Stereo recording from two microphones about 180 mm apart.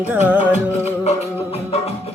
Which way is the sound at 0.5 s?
35° left (ahead or behind).